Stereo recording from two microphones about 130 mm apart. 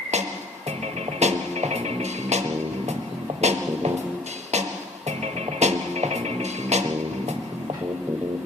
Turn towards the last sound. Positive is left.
turn(degrees=-60)  # may be behind; listen again after turning